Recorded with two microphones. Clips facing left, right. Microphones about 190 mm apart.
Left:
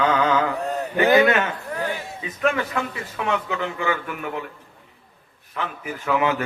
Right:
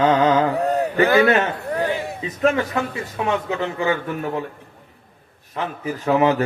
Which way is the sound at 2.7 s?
25° right (ahead or behind).